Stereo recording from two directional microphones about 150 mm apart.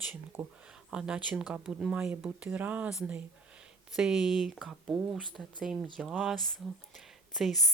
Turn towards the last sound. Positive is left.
turn(degrees=0)  # may be behind; listen again after turning